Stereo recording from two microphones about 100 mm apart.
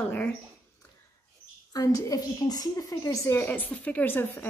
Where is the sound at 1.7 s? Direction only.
35° left (ahead or behind).